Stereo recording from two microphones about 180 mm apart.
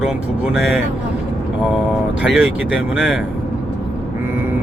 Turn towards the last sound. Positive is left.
turn(degrees=-5)  # may be behind; listen again after turning